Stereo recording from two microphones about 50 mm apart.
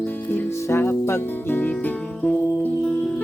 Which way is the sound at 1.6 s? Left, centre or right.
Left.